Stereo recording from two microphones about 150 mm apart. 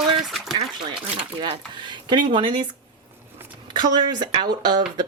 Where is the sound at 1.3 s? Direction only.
35° right (ahead or behind).